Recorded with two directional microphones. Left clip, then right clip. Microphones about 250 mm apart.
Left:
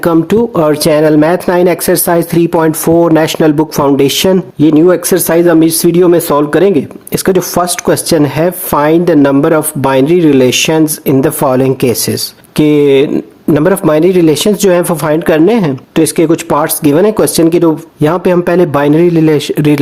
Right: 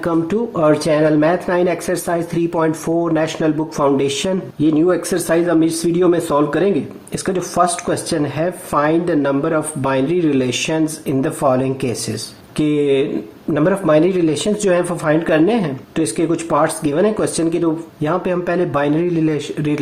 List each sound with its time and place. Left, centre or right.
0.0 s speech: left